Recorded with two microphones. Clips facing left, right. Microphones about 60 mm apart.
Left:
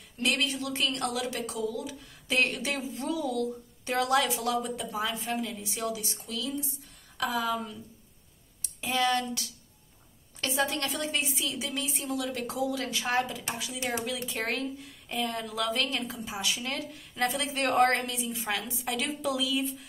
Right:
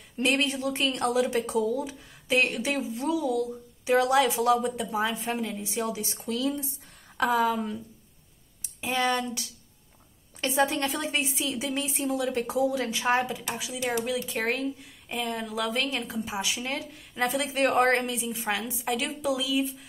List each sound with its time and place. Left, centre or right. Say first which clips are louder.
0.2 s a woman's voice: right 4 dB; right
1.4 s a woman's voice: right 6 dB; right
2.2 s a woman's voice: right 3 dB; centre; by 7.8 s right
8.8 s a woman's voice: right 1 dB; centre
14.0 s a woman's voice: right 4 dB; centre
16.7 s a woman's voice: right 2 dB; centre
18.6 s speech: right 3 dB; centre